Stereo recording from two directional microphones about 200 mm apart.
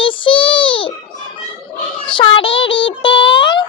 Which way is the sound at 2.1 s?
25° left (ahead or behind).